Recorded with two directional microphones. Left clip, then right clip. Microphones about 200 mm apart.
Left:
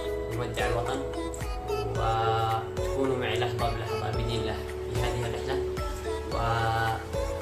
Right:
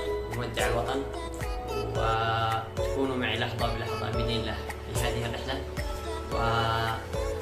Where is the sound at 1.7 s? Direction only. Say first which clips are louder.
Even; centre (ahead or behind).